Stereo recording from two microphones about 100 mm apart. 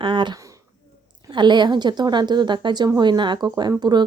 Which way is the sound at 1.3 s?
50° right (ahead or behind).